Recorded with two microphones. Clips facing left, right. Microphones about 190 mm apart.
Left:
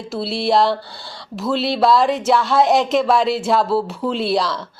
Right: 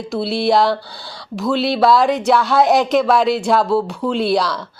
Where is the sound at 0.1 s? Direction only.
Centre (ahead or behind).